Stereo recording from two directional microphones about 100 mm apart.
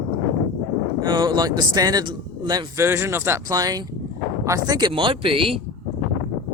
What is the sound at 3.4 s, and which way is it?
Speech, 40° right (ahead or behind).